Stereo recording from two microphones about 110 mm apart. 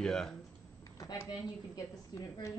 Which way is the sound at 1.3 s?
35° left (ahead or behind).